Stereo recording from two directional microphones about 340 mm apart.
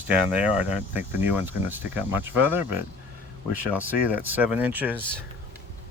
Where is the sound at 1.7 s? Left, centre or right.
Centre.